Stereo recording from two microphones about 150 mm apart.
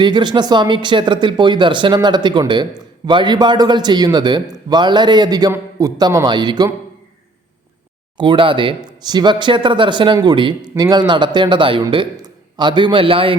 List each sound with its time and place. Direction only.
0.0 s speech: 30° right (ahead or behind)
8.2 s a man's voice: 35° right (ahead or behind)